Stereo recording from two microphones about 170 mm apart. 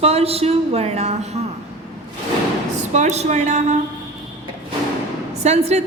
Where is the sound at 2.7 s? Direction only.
45° right (ahead or behind).